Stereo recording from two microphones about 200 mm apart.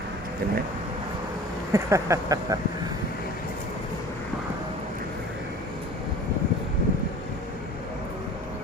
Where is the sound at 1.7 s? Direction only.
15° right (ahead or behind).